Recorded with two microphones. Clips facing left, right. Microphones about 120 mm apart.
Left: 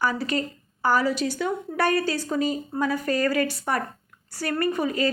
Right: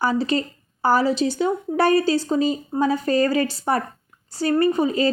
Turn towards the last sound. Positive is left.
turn(degrees=-25)  # may be behind; listen again after turning